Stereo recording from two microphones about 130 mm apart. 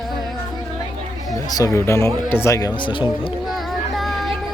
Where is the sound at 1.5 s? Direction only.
25° left (ahead or behind).